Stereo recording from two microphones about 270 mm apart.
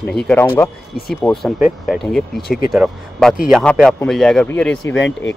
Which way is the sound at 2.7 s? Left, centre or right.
Centre.